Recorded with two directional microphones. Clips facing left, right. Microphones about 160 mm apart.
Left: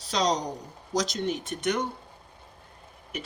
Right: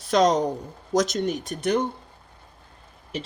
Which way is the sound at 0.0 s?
55° right (ahead or behind).